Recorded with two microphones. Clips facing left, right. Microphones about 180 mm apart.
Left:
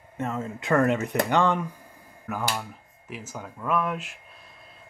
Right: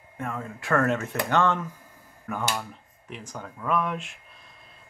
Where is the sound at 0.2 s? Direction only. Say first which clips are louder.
Left 3 dB; 25° left (ahead or behind).